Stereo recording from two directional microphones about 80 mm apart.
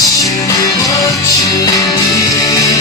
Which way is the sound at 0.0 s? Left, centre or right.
Left.